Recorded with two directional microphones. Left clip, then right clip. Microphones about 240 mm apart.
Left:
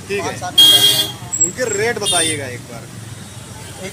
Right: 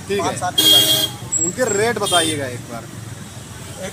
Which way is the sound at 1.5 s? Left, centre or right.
Right.